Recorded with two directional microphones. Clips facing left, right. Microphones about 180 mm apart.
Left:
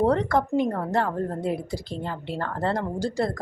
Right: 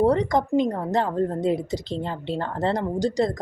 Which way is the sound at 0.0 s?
15° right (ahead or behind).